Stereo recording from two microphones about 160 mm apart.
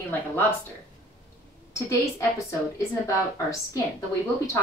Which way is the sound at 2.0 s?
20° left (ahead or behind).